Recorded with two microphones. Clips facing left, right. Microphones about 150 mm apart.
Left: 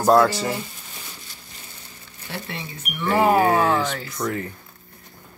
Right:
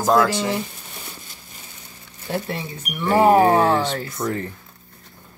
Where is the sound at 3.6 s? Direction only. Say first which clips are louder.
Right 2 dB; 30° right (ahead or behind).